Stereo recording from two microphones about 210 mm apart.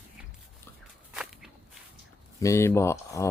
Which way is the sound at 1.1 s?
Centre (ahead or behind).